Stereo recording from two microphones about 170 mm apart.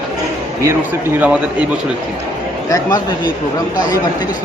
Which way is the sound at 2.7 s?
20° left (ahead or behind).